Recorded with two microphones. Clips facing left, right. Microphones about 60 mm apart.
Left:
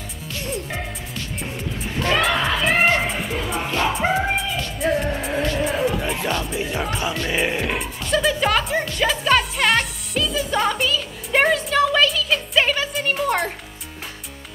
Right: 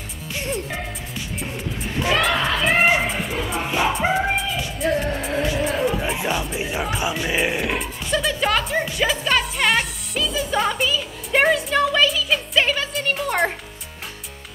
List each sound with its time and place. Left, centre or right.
1.1 s music: centre